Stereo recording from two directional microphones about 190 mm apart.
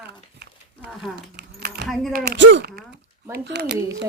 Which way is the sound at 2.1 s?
60° right (ahead or behind).